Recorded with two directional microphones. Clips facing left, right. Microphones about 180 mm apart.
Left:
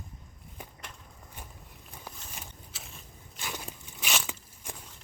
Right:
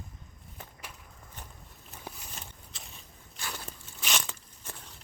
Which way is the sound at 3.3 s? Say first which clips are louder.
Left 2 dB; 15° left (ahead or behind).